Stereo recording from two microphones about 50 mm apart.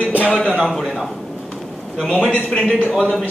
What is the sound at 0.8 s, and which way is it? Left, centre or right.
Speech, centre.